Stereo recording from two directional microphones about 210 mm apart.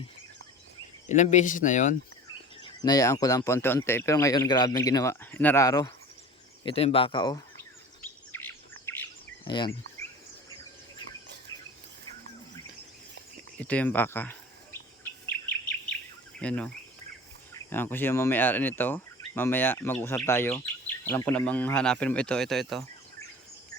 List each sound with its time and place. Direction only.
1.0 s speech: 35° left (ahead or behind)
2.6 s speech: 20° left (ahead or behind)
6.7 s speech: 25° left (ahead or behind)
8.0 s bird: 10° left (ahead or behind)
9.4 s cricket: 20° left (ahead or behind)
13.6 s speech: 5° left (ahead or behind)
15.3 s bird: 5° left (ahead or behind)
16.4 s speech: 5° left (ahead or behind)